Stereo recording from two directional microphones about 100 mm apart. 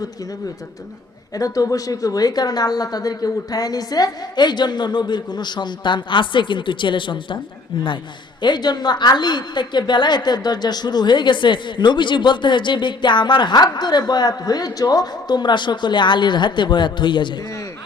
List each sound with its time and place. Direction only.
1.3 s a woman's voice: 35° left (ahead or behind); by 7.3 s 55° left (ahead or behind)
8.4 s a woman's voice: 50° left (ahead or behind)